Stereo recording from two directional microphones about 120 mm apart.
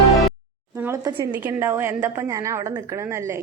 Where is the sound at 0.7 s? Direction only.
15° right (ahead or behind).